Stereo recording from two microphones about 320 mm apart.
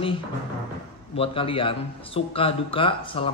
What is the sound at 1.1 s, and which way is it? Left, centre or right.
A man's voice, centre.